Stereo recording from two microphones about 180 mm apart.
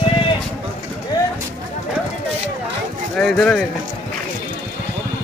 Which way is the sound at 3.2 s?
Centre (ahead or behind).